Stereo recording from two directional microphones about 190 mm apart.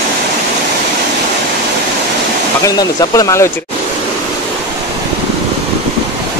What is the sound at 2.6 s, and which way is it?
Speech, 15° left (ahead or behind).